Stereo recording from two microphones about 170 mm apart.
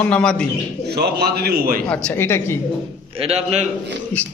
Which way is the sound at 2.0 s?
15° left (ahead or behind).